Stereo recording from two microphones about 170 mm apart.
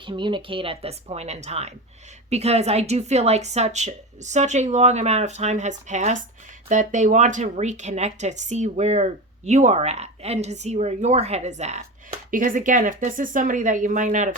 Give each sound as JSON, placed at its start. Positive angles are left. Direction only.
{"t": 0.0, "sound": "a woman's voice", "side_deg": -30}